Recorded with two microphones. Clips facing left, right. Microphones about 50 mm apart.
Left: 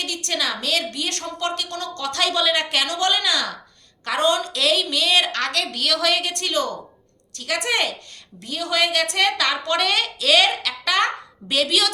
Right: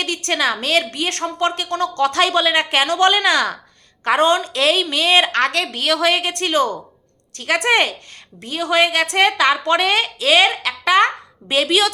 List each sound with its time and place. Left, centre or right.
0.3 s a woman's voice: right